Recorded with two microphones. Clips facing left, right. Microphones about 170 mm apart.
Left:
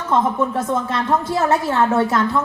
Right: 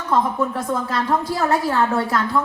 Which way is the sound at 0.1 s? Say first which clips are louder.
Left 2 dB; 25° left (ahead or behind).